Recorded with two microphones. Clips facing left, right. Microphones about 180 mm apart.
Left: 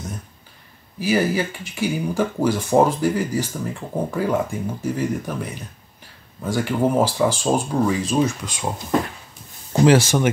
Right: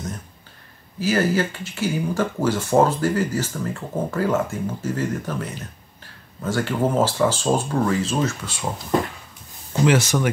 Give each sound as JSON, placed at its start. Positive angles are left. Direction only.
{"t": 0.9, "sound": "speech", "side_deg": 10}
{"t": 9.7, "sound": "speech", "side_deg": 30}